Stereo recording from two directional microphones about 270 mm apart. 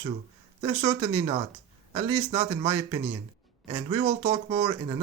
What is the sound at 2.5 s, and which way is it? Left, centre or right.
Speech, centre.